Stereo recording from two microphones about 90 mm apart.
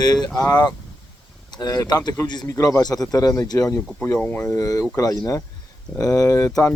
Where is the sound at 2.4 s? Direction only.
35° left (ahead or behind).